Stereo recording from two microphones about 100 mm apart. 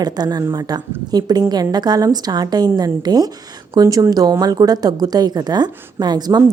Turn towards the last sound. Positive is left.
turn(degrees=-45)  # may be behind; listen again after turning